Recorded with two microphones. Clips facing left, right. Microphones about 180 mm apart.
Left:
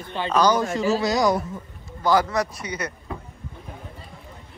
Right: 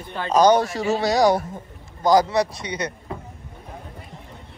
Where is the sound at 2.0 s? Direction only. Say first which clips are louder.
Right 3 dB; 40° right (ahead or behind).